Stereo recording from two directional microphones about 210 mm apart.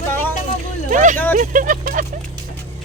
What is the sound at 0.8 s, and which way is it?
Speech, 35° right (ahead or behind).